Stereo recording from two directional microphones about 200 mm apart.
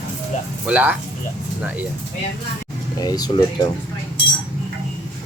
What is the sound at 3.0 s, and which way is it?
Speech, 20° left (ahead or behind).